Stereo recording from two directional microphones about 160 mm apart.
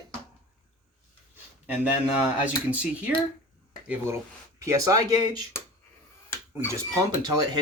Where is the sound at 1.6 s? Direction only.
10° right (ahead or behind).